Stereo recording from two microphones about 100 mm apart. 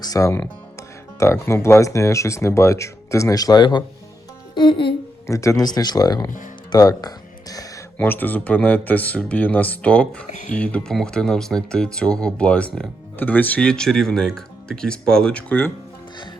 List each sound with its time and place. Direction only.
0.0 s speech: 35° left (ahead or behind); by 4.9 s 55° left (ahead or behind)
5.2 s speech: 30° left (ahead or behind)
5.6 s speech: 45° left (ahead or behind)
7.9 s speech: 20° left (ahead or behind)